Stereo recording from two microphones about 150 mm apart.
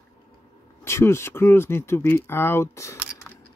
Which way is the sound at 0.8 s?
15° left (ahead or behind).